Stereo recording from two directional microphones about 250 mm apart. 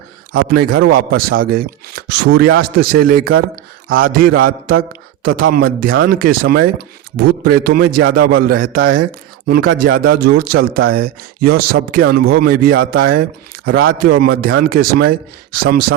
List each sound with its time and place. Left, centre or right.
0.4 s speech: right